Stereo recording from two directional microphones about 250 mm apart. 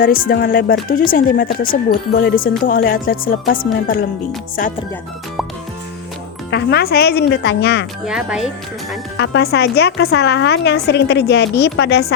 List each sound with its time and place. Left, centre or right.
0.0 s speech: left
6.5 s speech: left
8.0 s speech: centre
9.1 s speech: left